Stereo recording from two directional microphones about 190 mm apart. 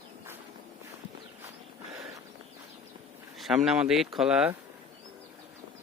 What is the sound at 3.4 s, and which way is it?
Speech, centre (ahead or behind).